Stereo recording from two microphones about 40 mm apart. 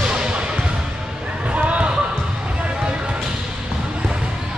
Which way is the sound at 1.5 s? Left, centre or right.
Right.